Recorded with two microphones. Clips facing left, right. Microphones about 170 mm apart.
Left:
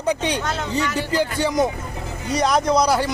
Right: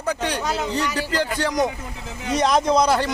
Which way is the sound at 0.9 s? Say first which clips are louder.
Left 2 dB; 15° left (ahead or behind).